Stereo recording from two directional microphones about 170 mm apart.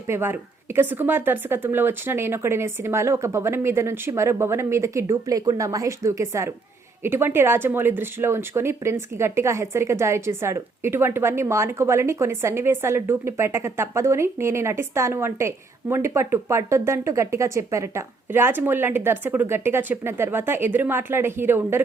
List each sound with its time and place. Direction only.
0.1 s speech: 15° right (ahead or behind)